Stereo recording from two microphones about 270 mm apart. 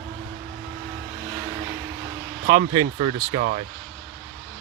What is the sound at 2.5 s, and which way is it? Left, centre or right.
Speech, right.